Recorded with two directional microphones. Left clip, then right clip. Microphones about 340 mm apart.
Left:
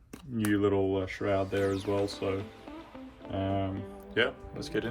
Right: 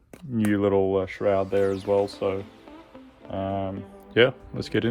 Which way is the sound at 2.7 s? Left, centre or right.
Centre.